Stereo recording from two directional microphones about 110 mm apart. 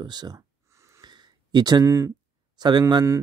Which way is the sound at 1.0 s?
40° right (ahead or behind).